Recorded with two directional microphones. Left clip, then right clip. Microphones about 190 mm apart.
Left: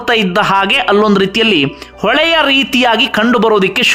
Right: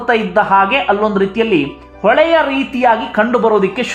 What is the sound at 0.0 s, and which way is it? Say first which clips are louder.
Speech: left 1 dB; 35° left (ahead or behind).